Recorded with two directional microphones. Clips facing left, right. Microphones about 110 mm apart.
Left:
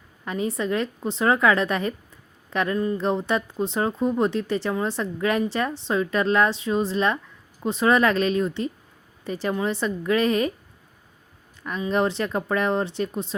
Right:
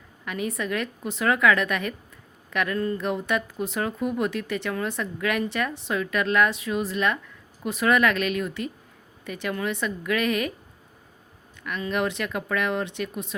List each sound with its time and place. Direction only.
0.3 s speech: 30° left (ahead or behind)
2.7 s speech: 15° left (ahead or behind)
3.0 s a woman's voice: 30° left (ahead or behind)
11.9 s a woman's voice: 30° left (ahead or behind)